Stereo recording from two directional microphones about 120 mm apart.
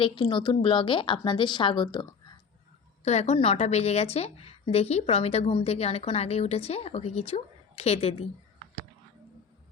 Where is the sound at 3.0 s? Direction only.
65° left (ahead or behind).